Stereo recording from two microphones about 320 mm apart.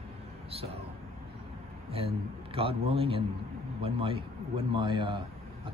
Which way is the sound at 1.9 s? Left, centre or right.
Centre.